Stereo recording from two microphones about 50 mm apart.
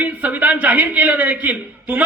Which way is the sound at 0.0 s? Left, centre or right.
Right.